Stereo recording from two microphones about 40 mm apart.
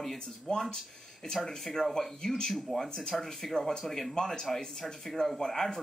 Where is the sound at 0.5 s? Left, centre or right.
Centre.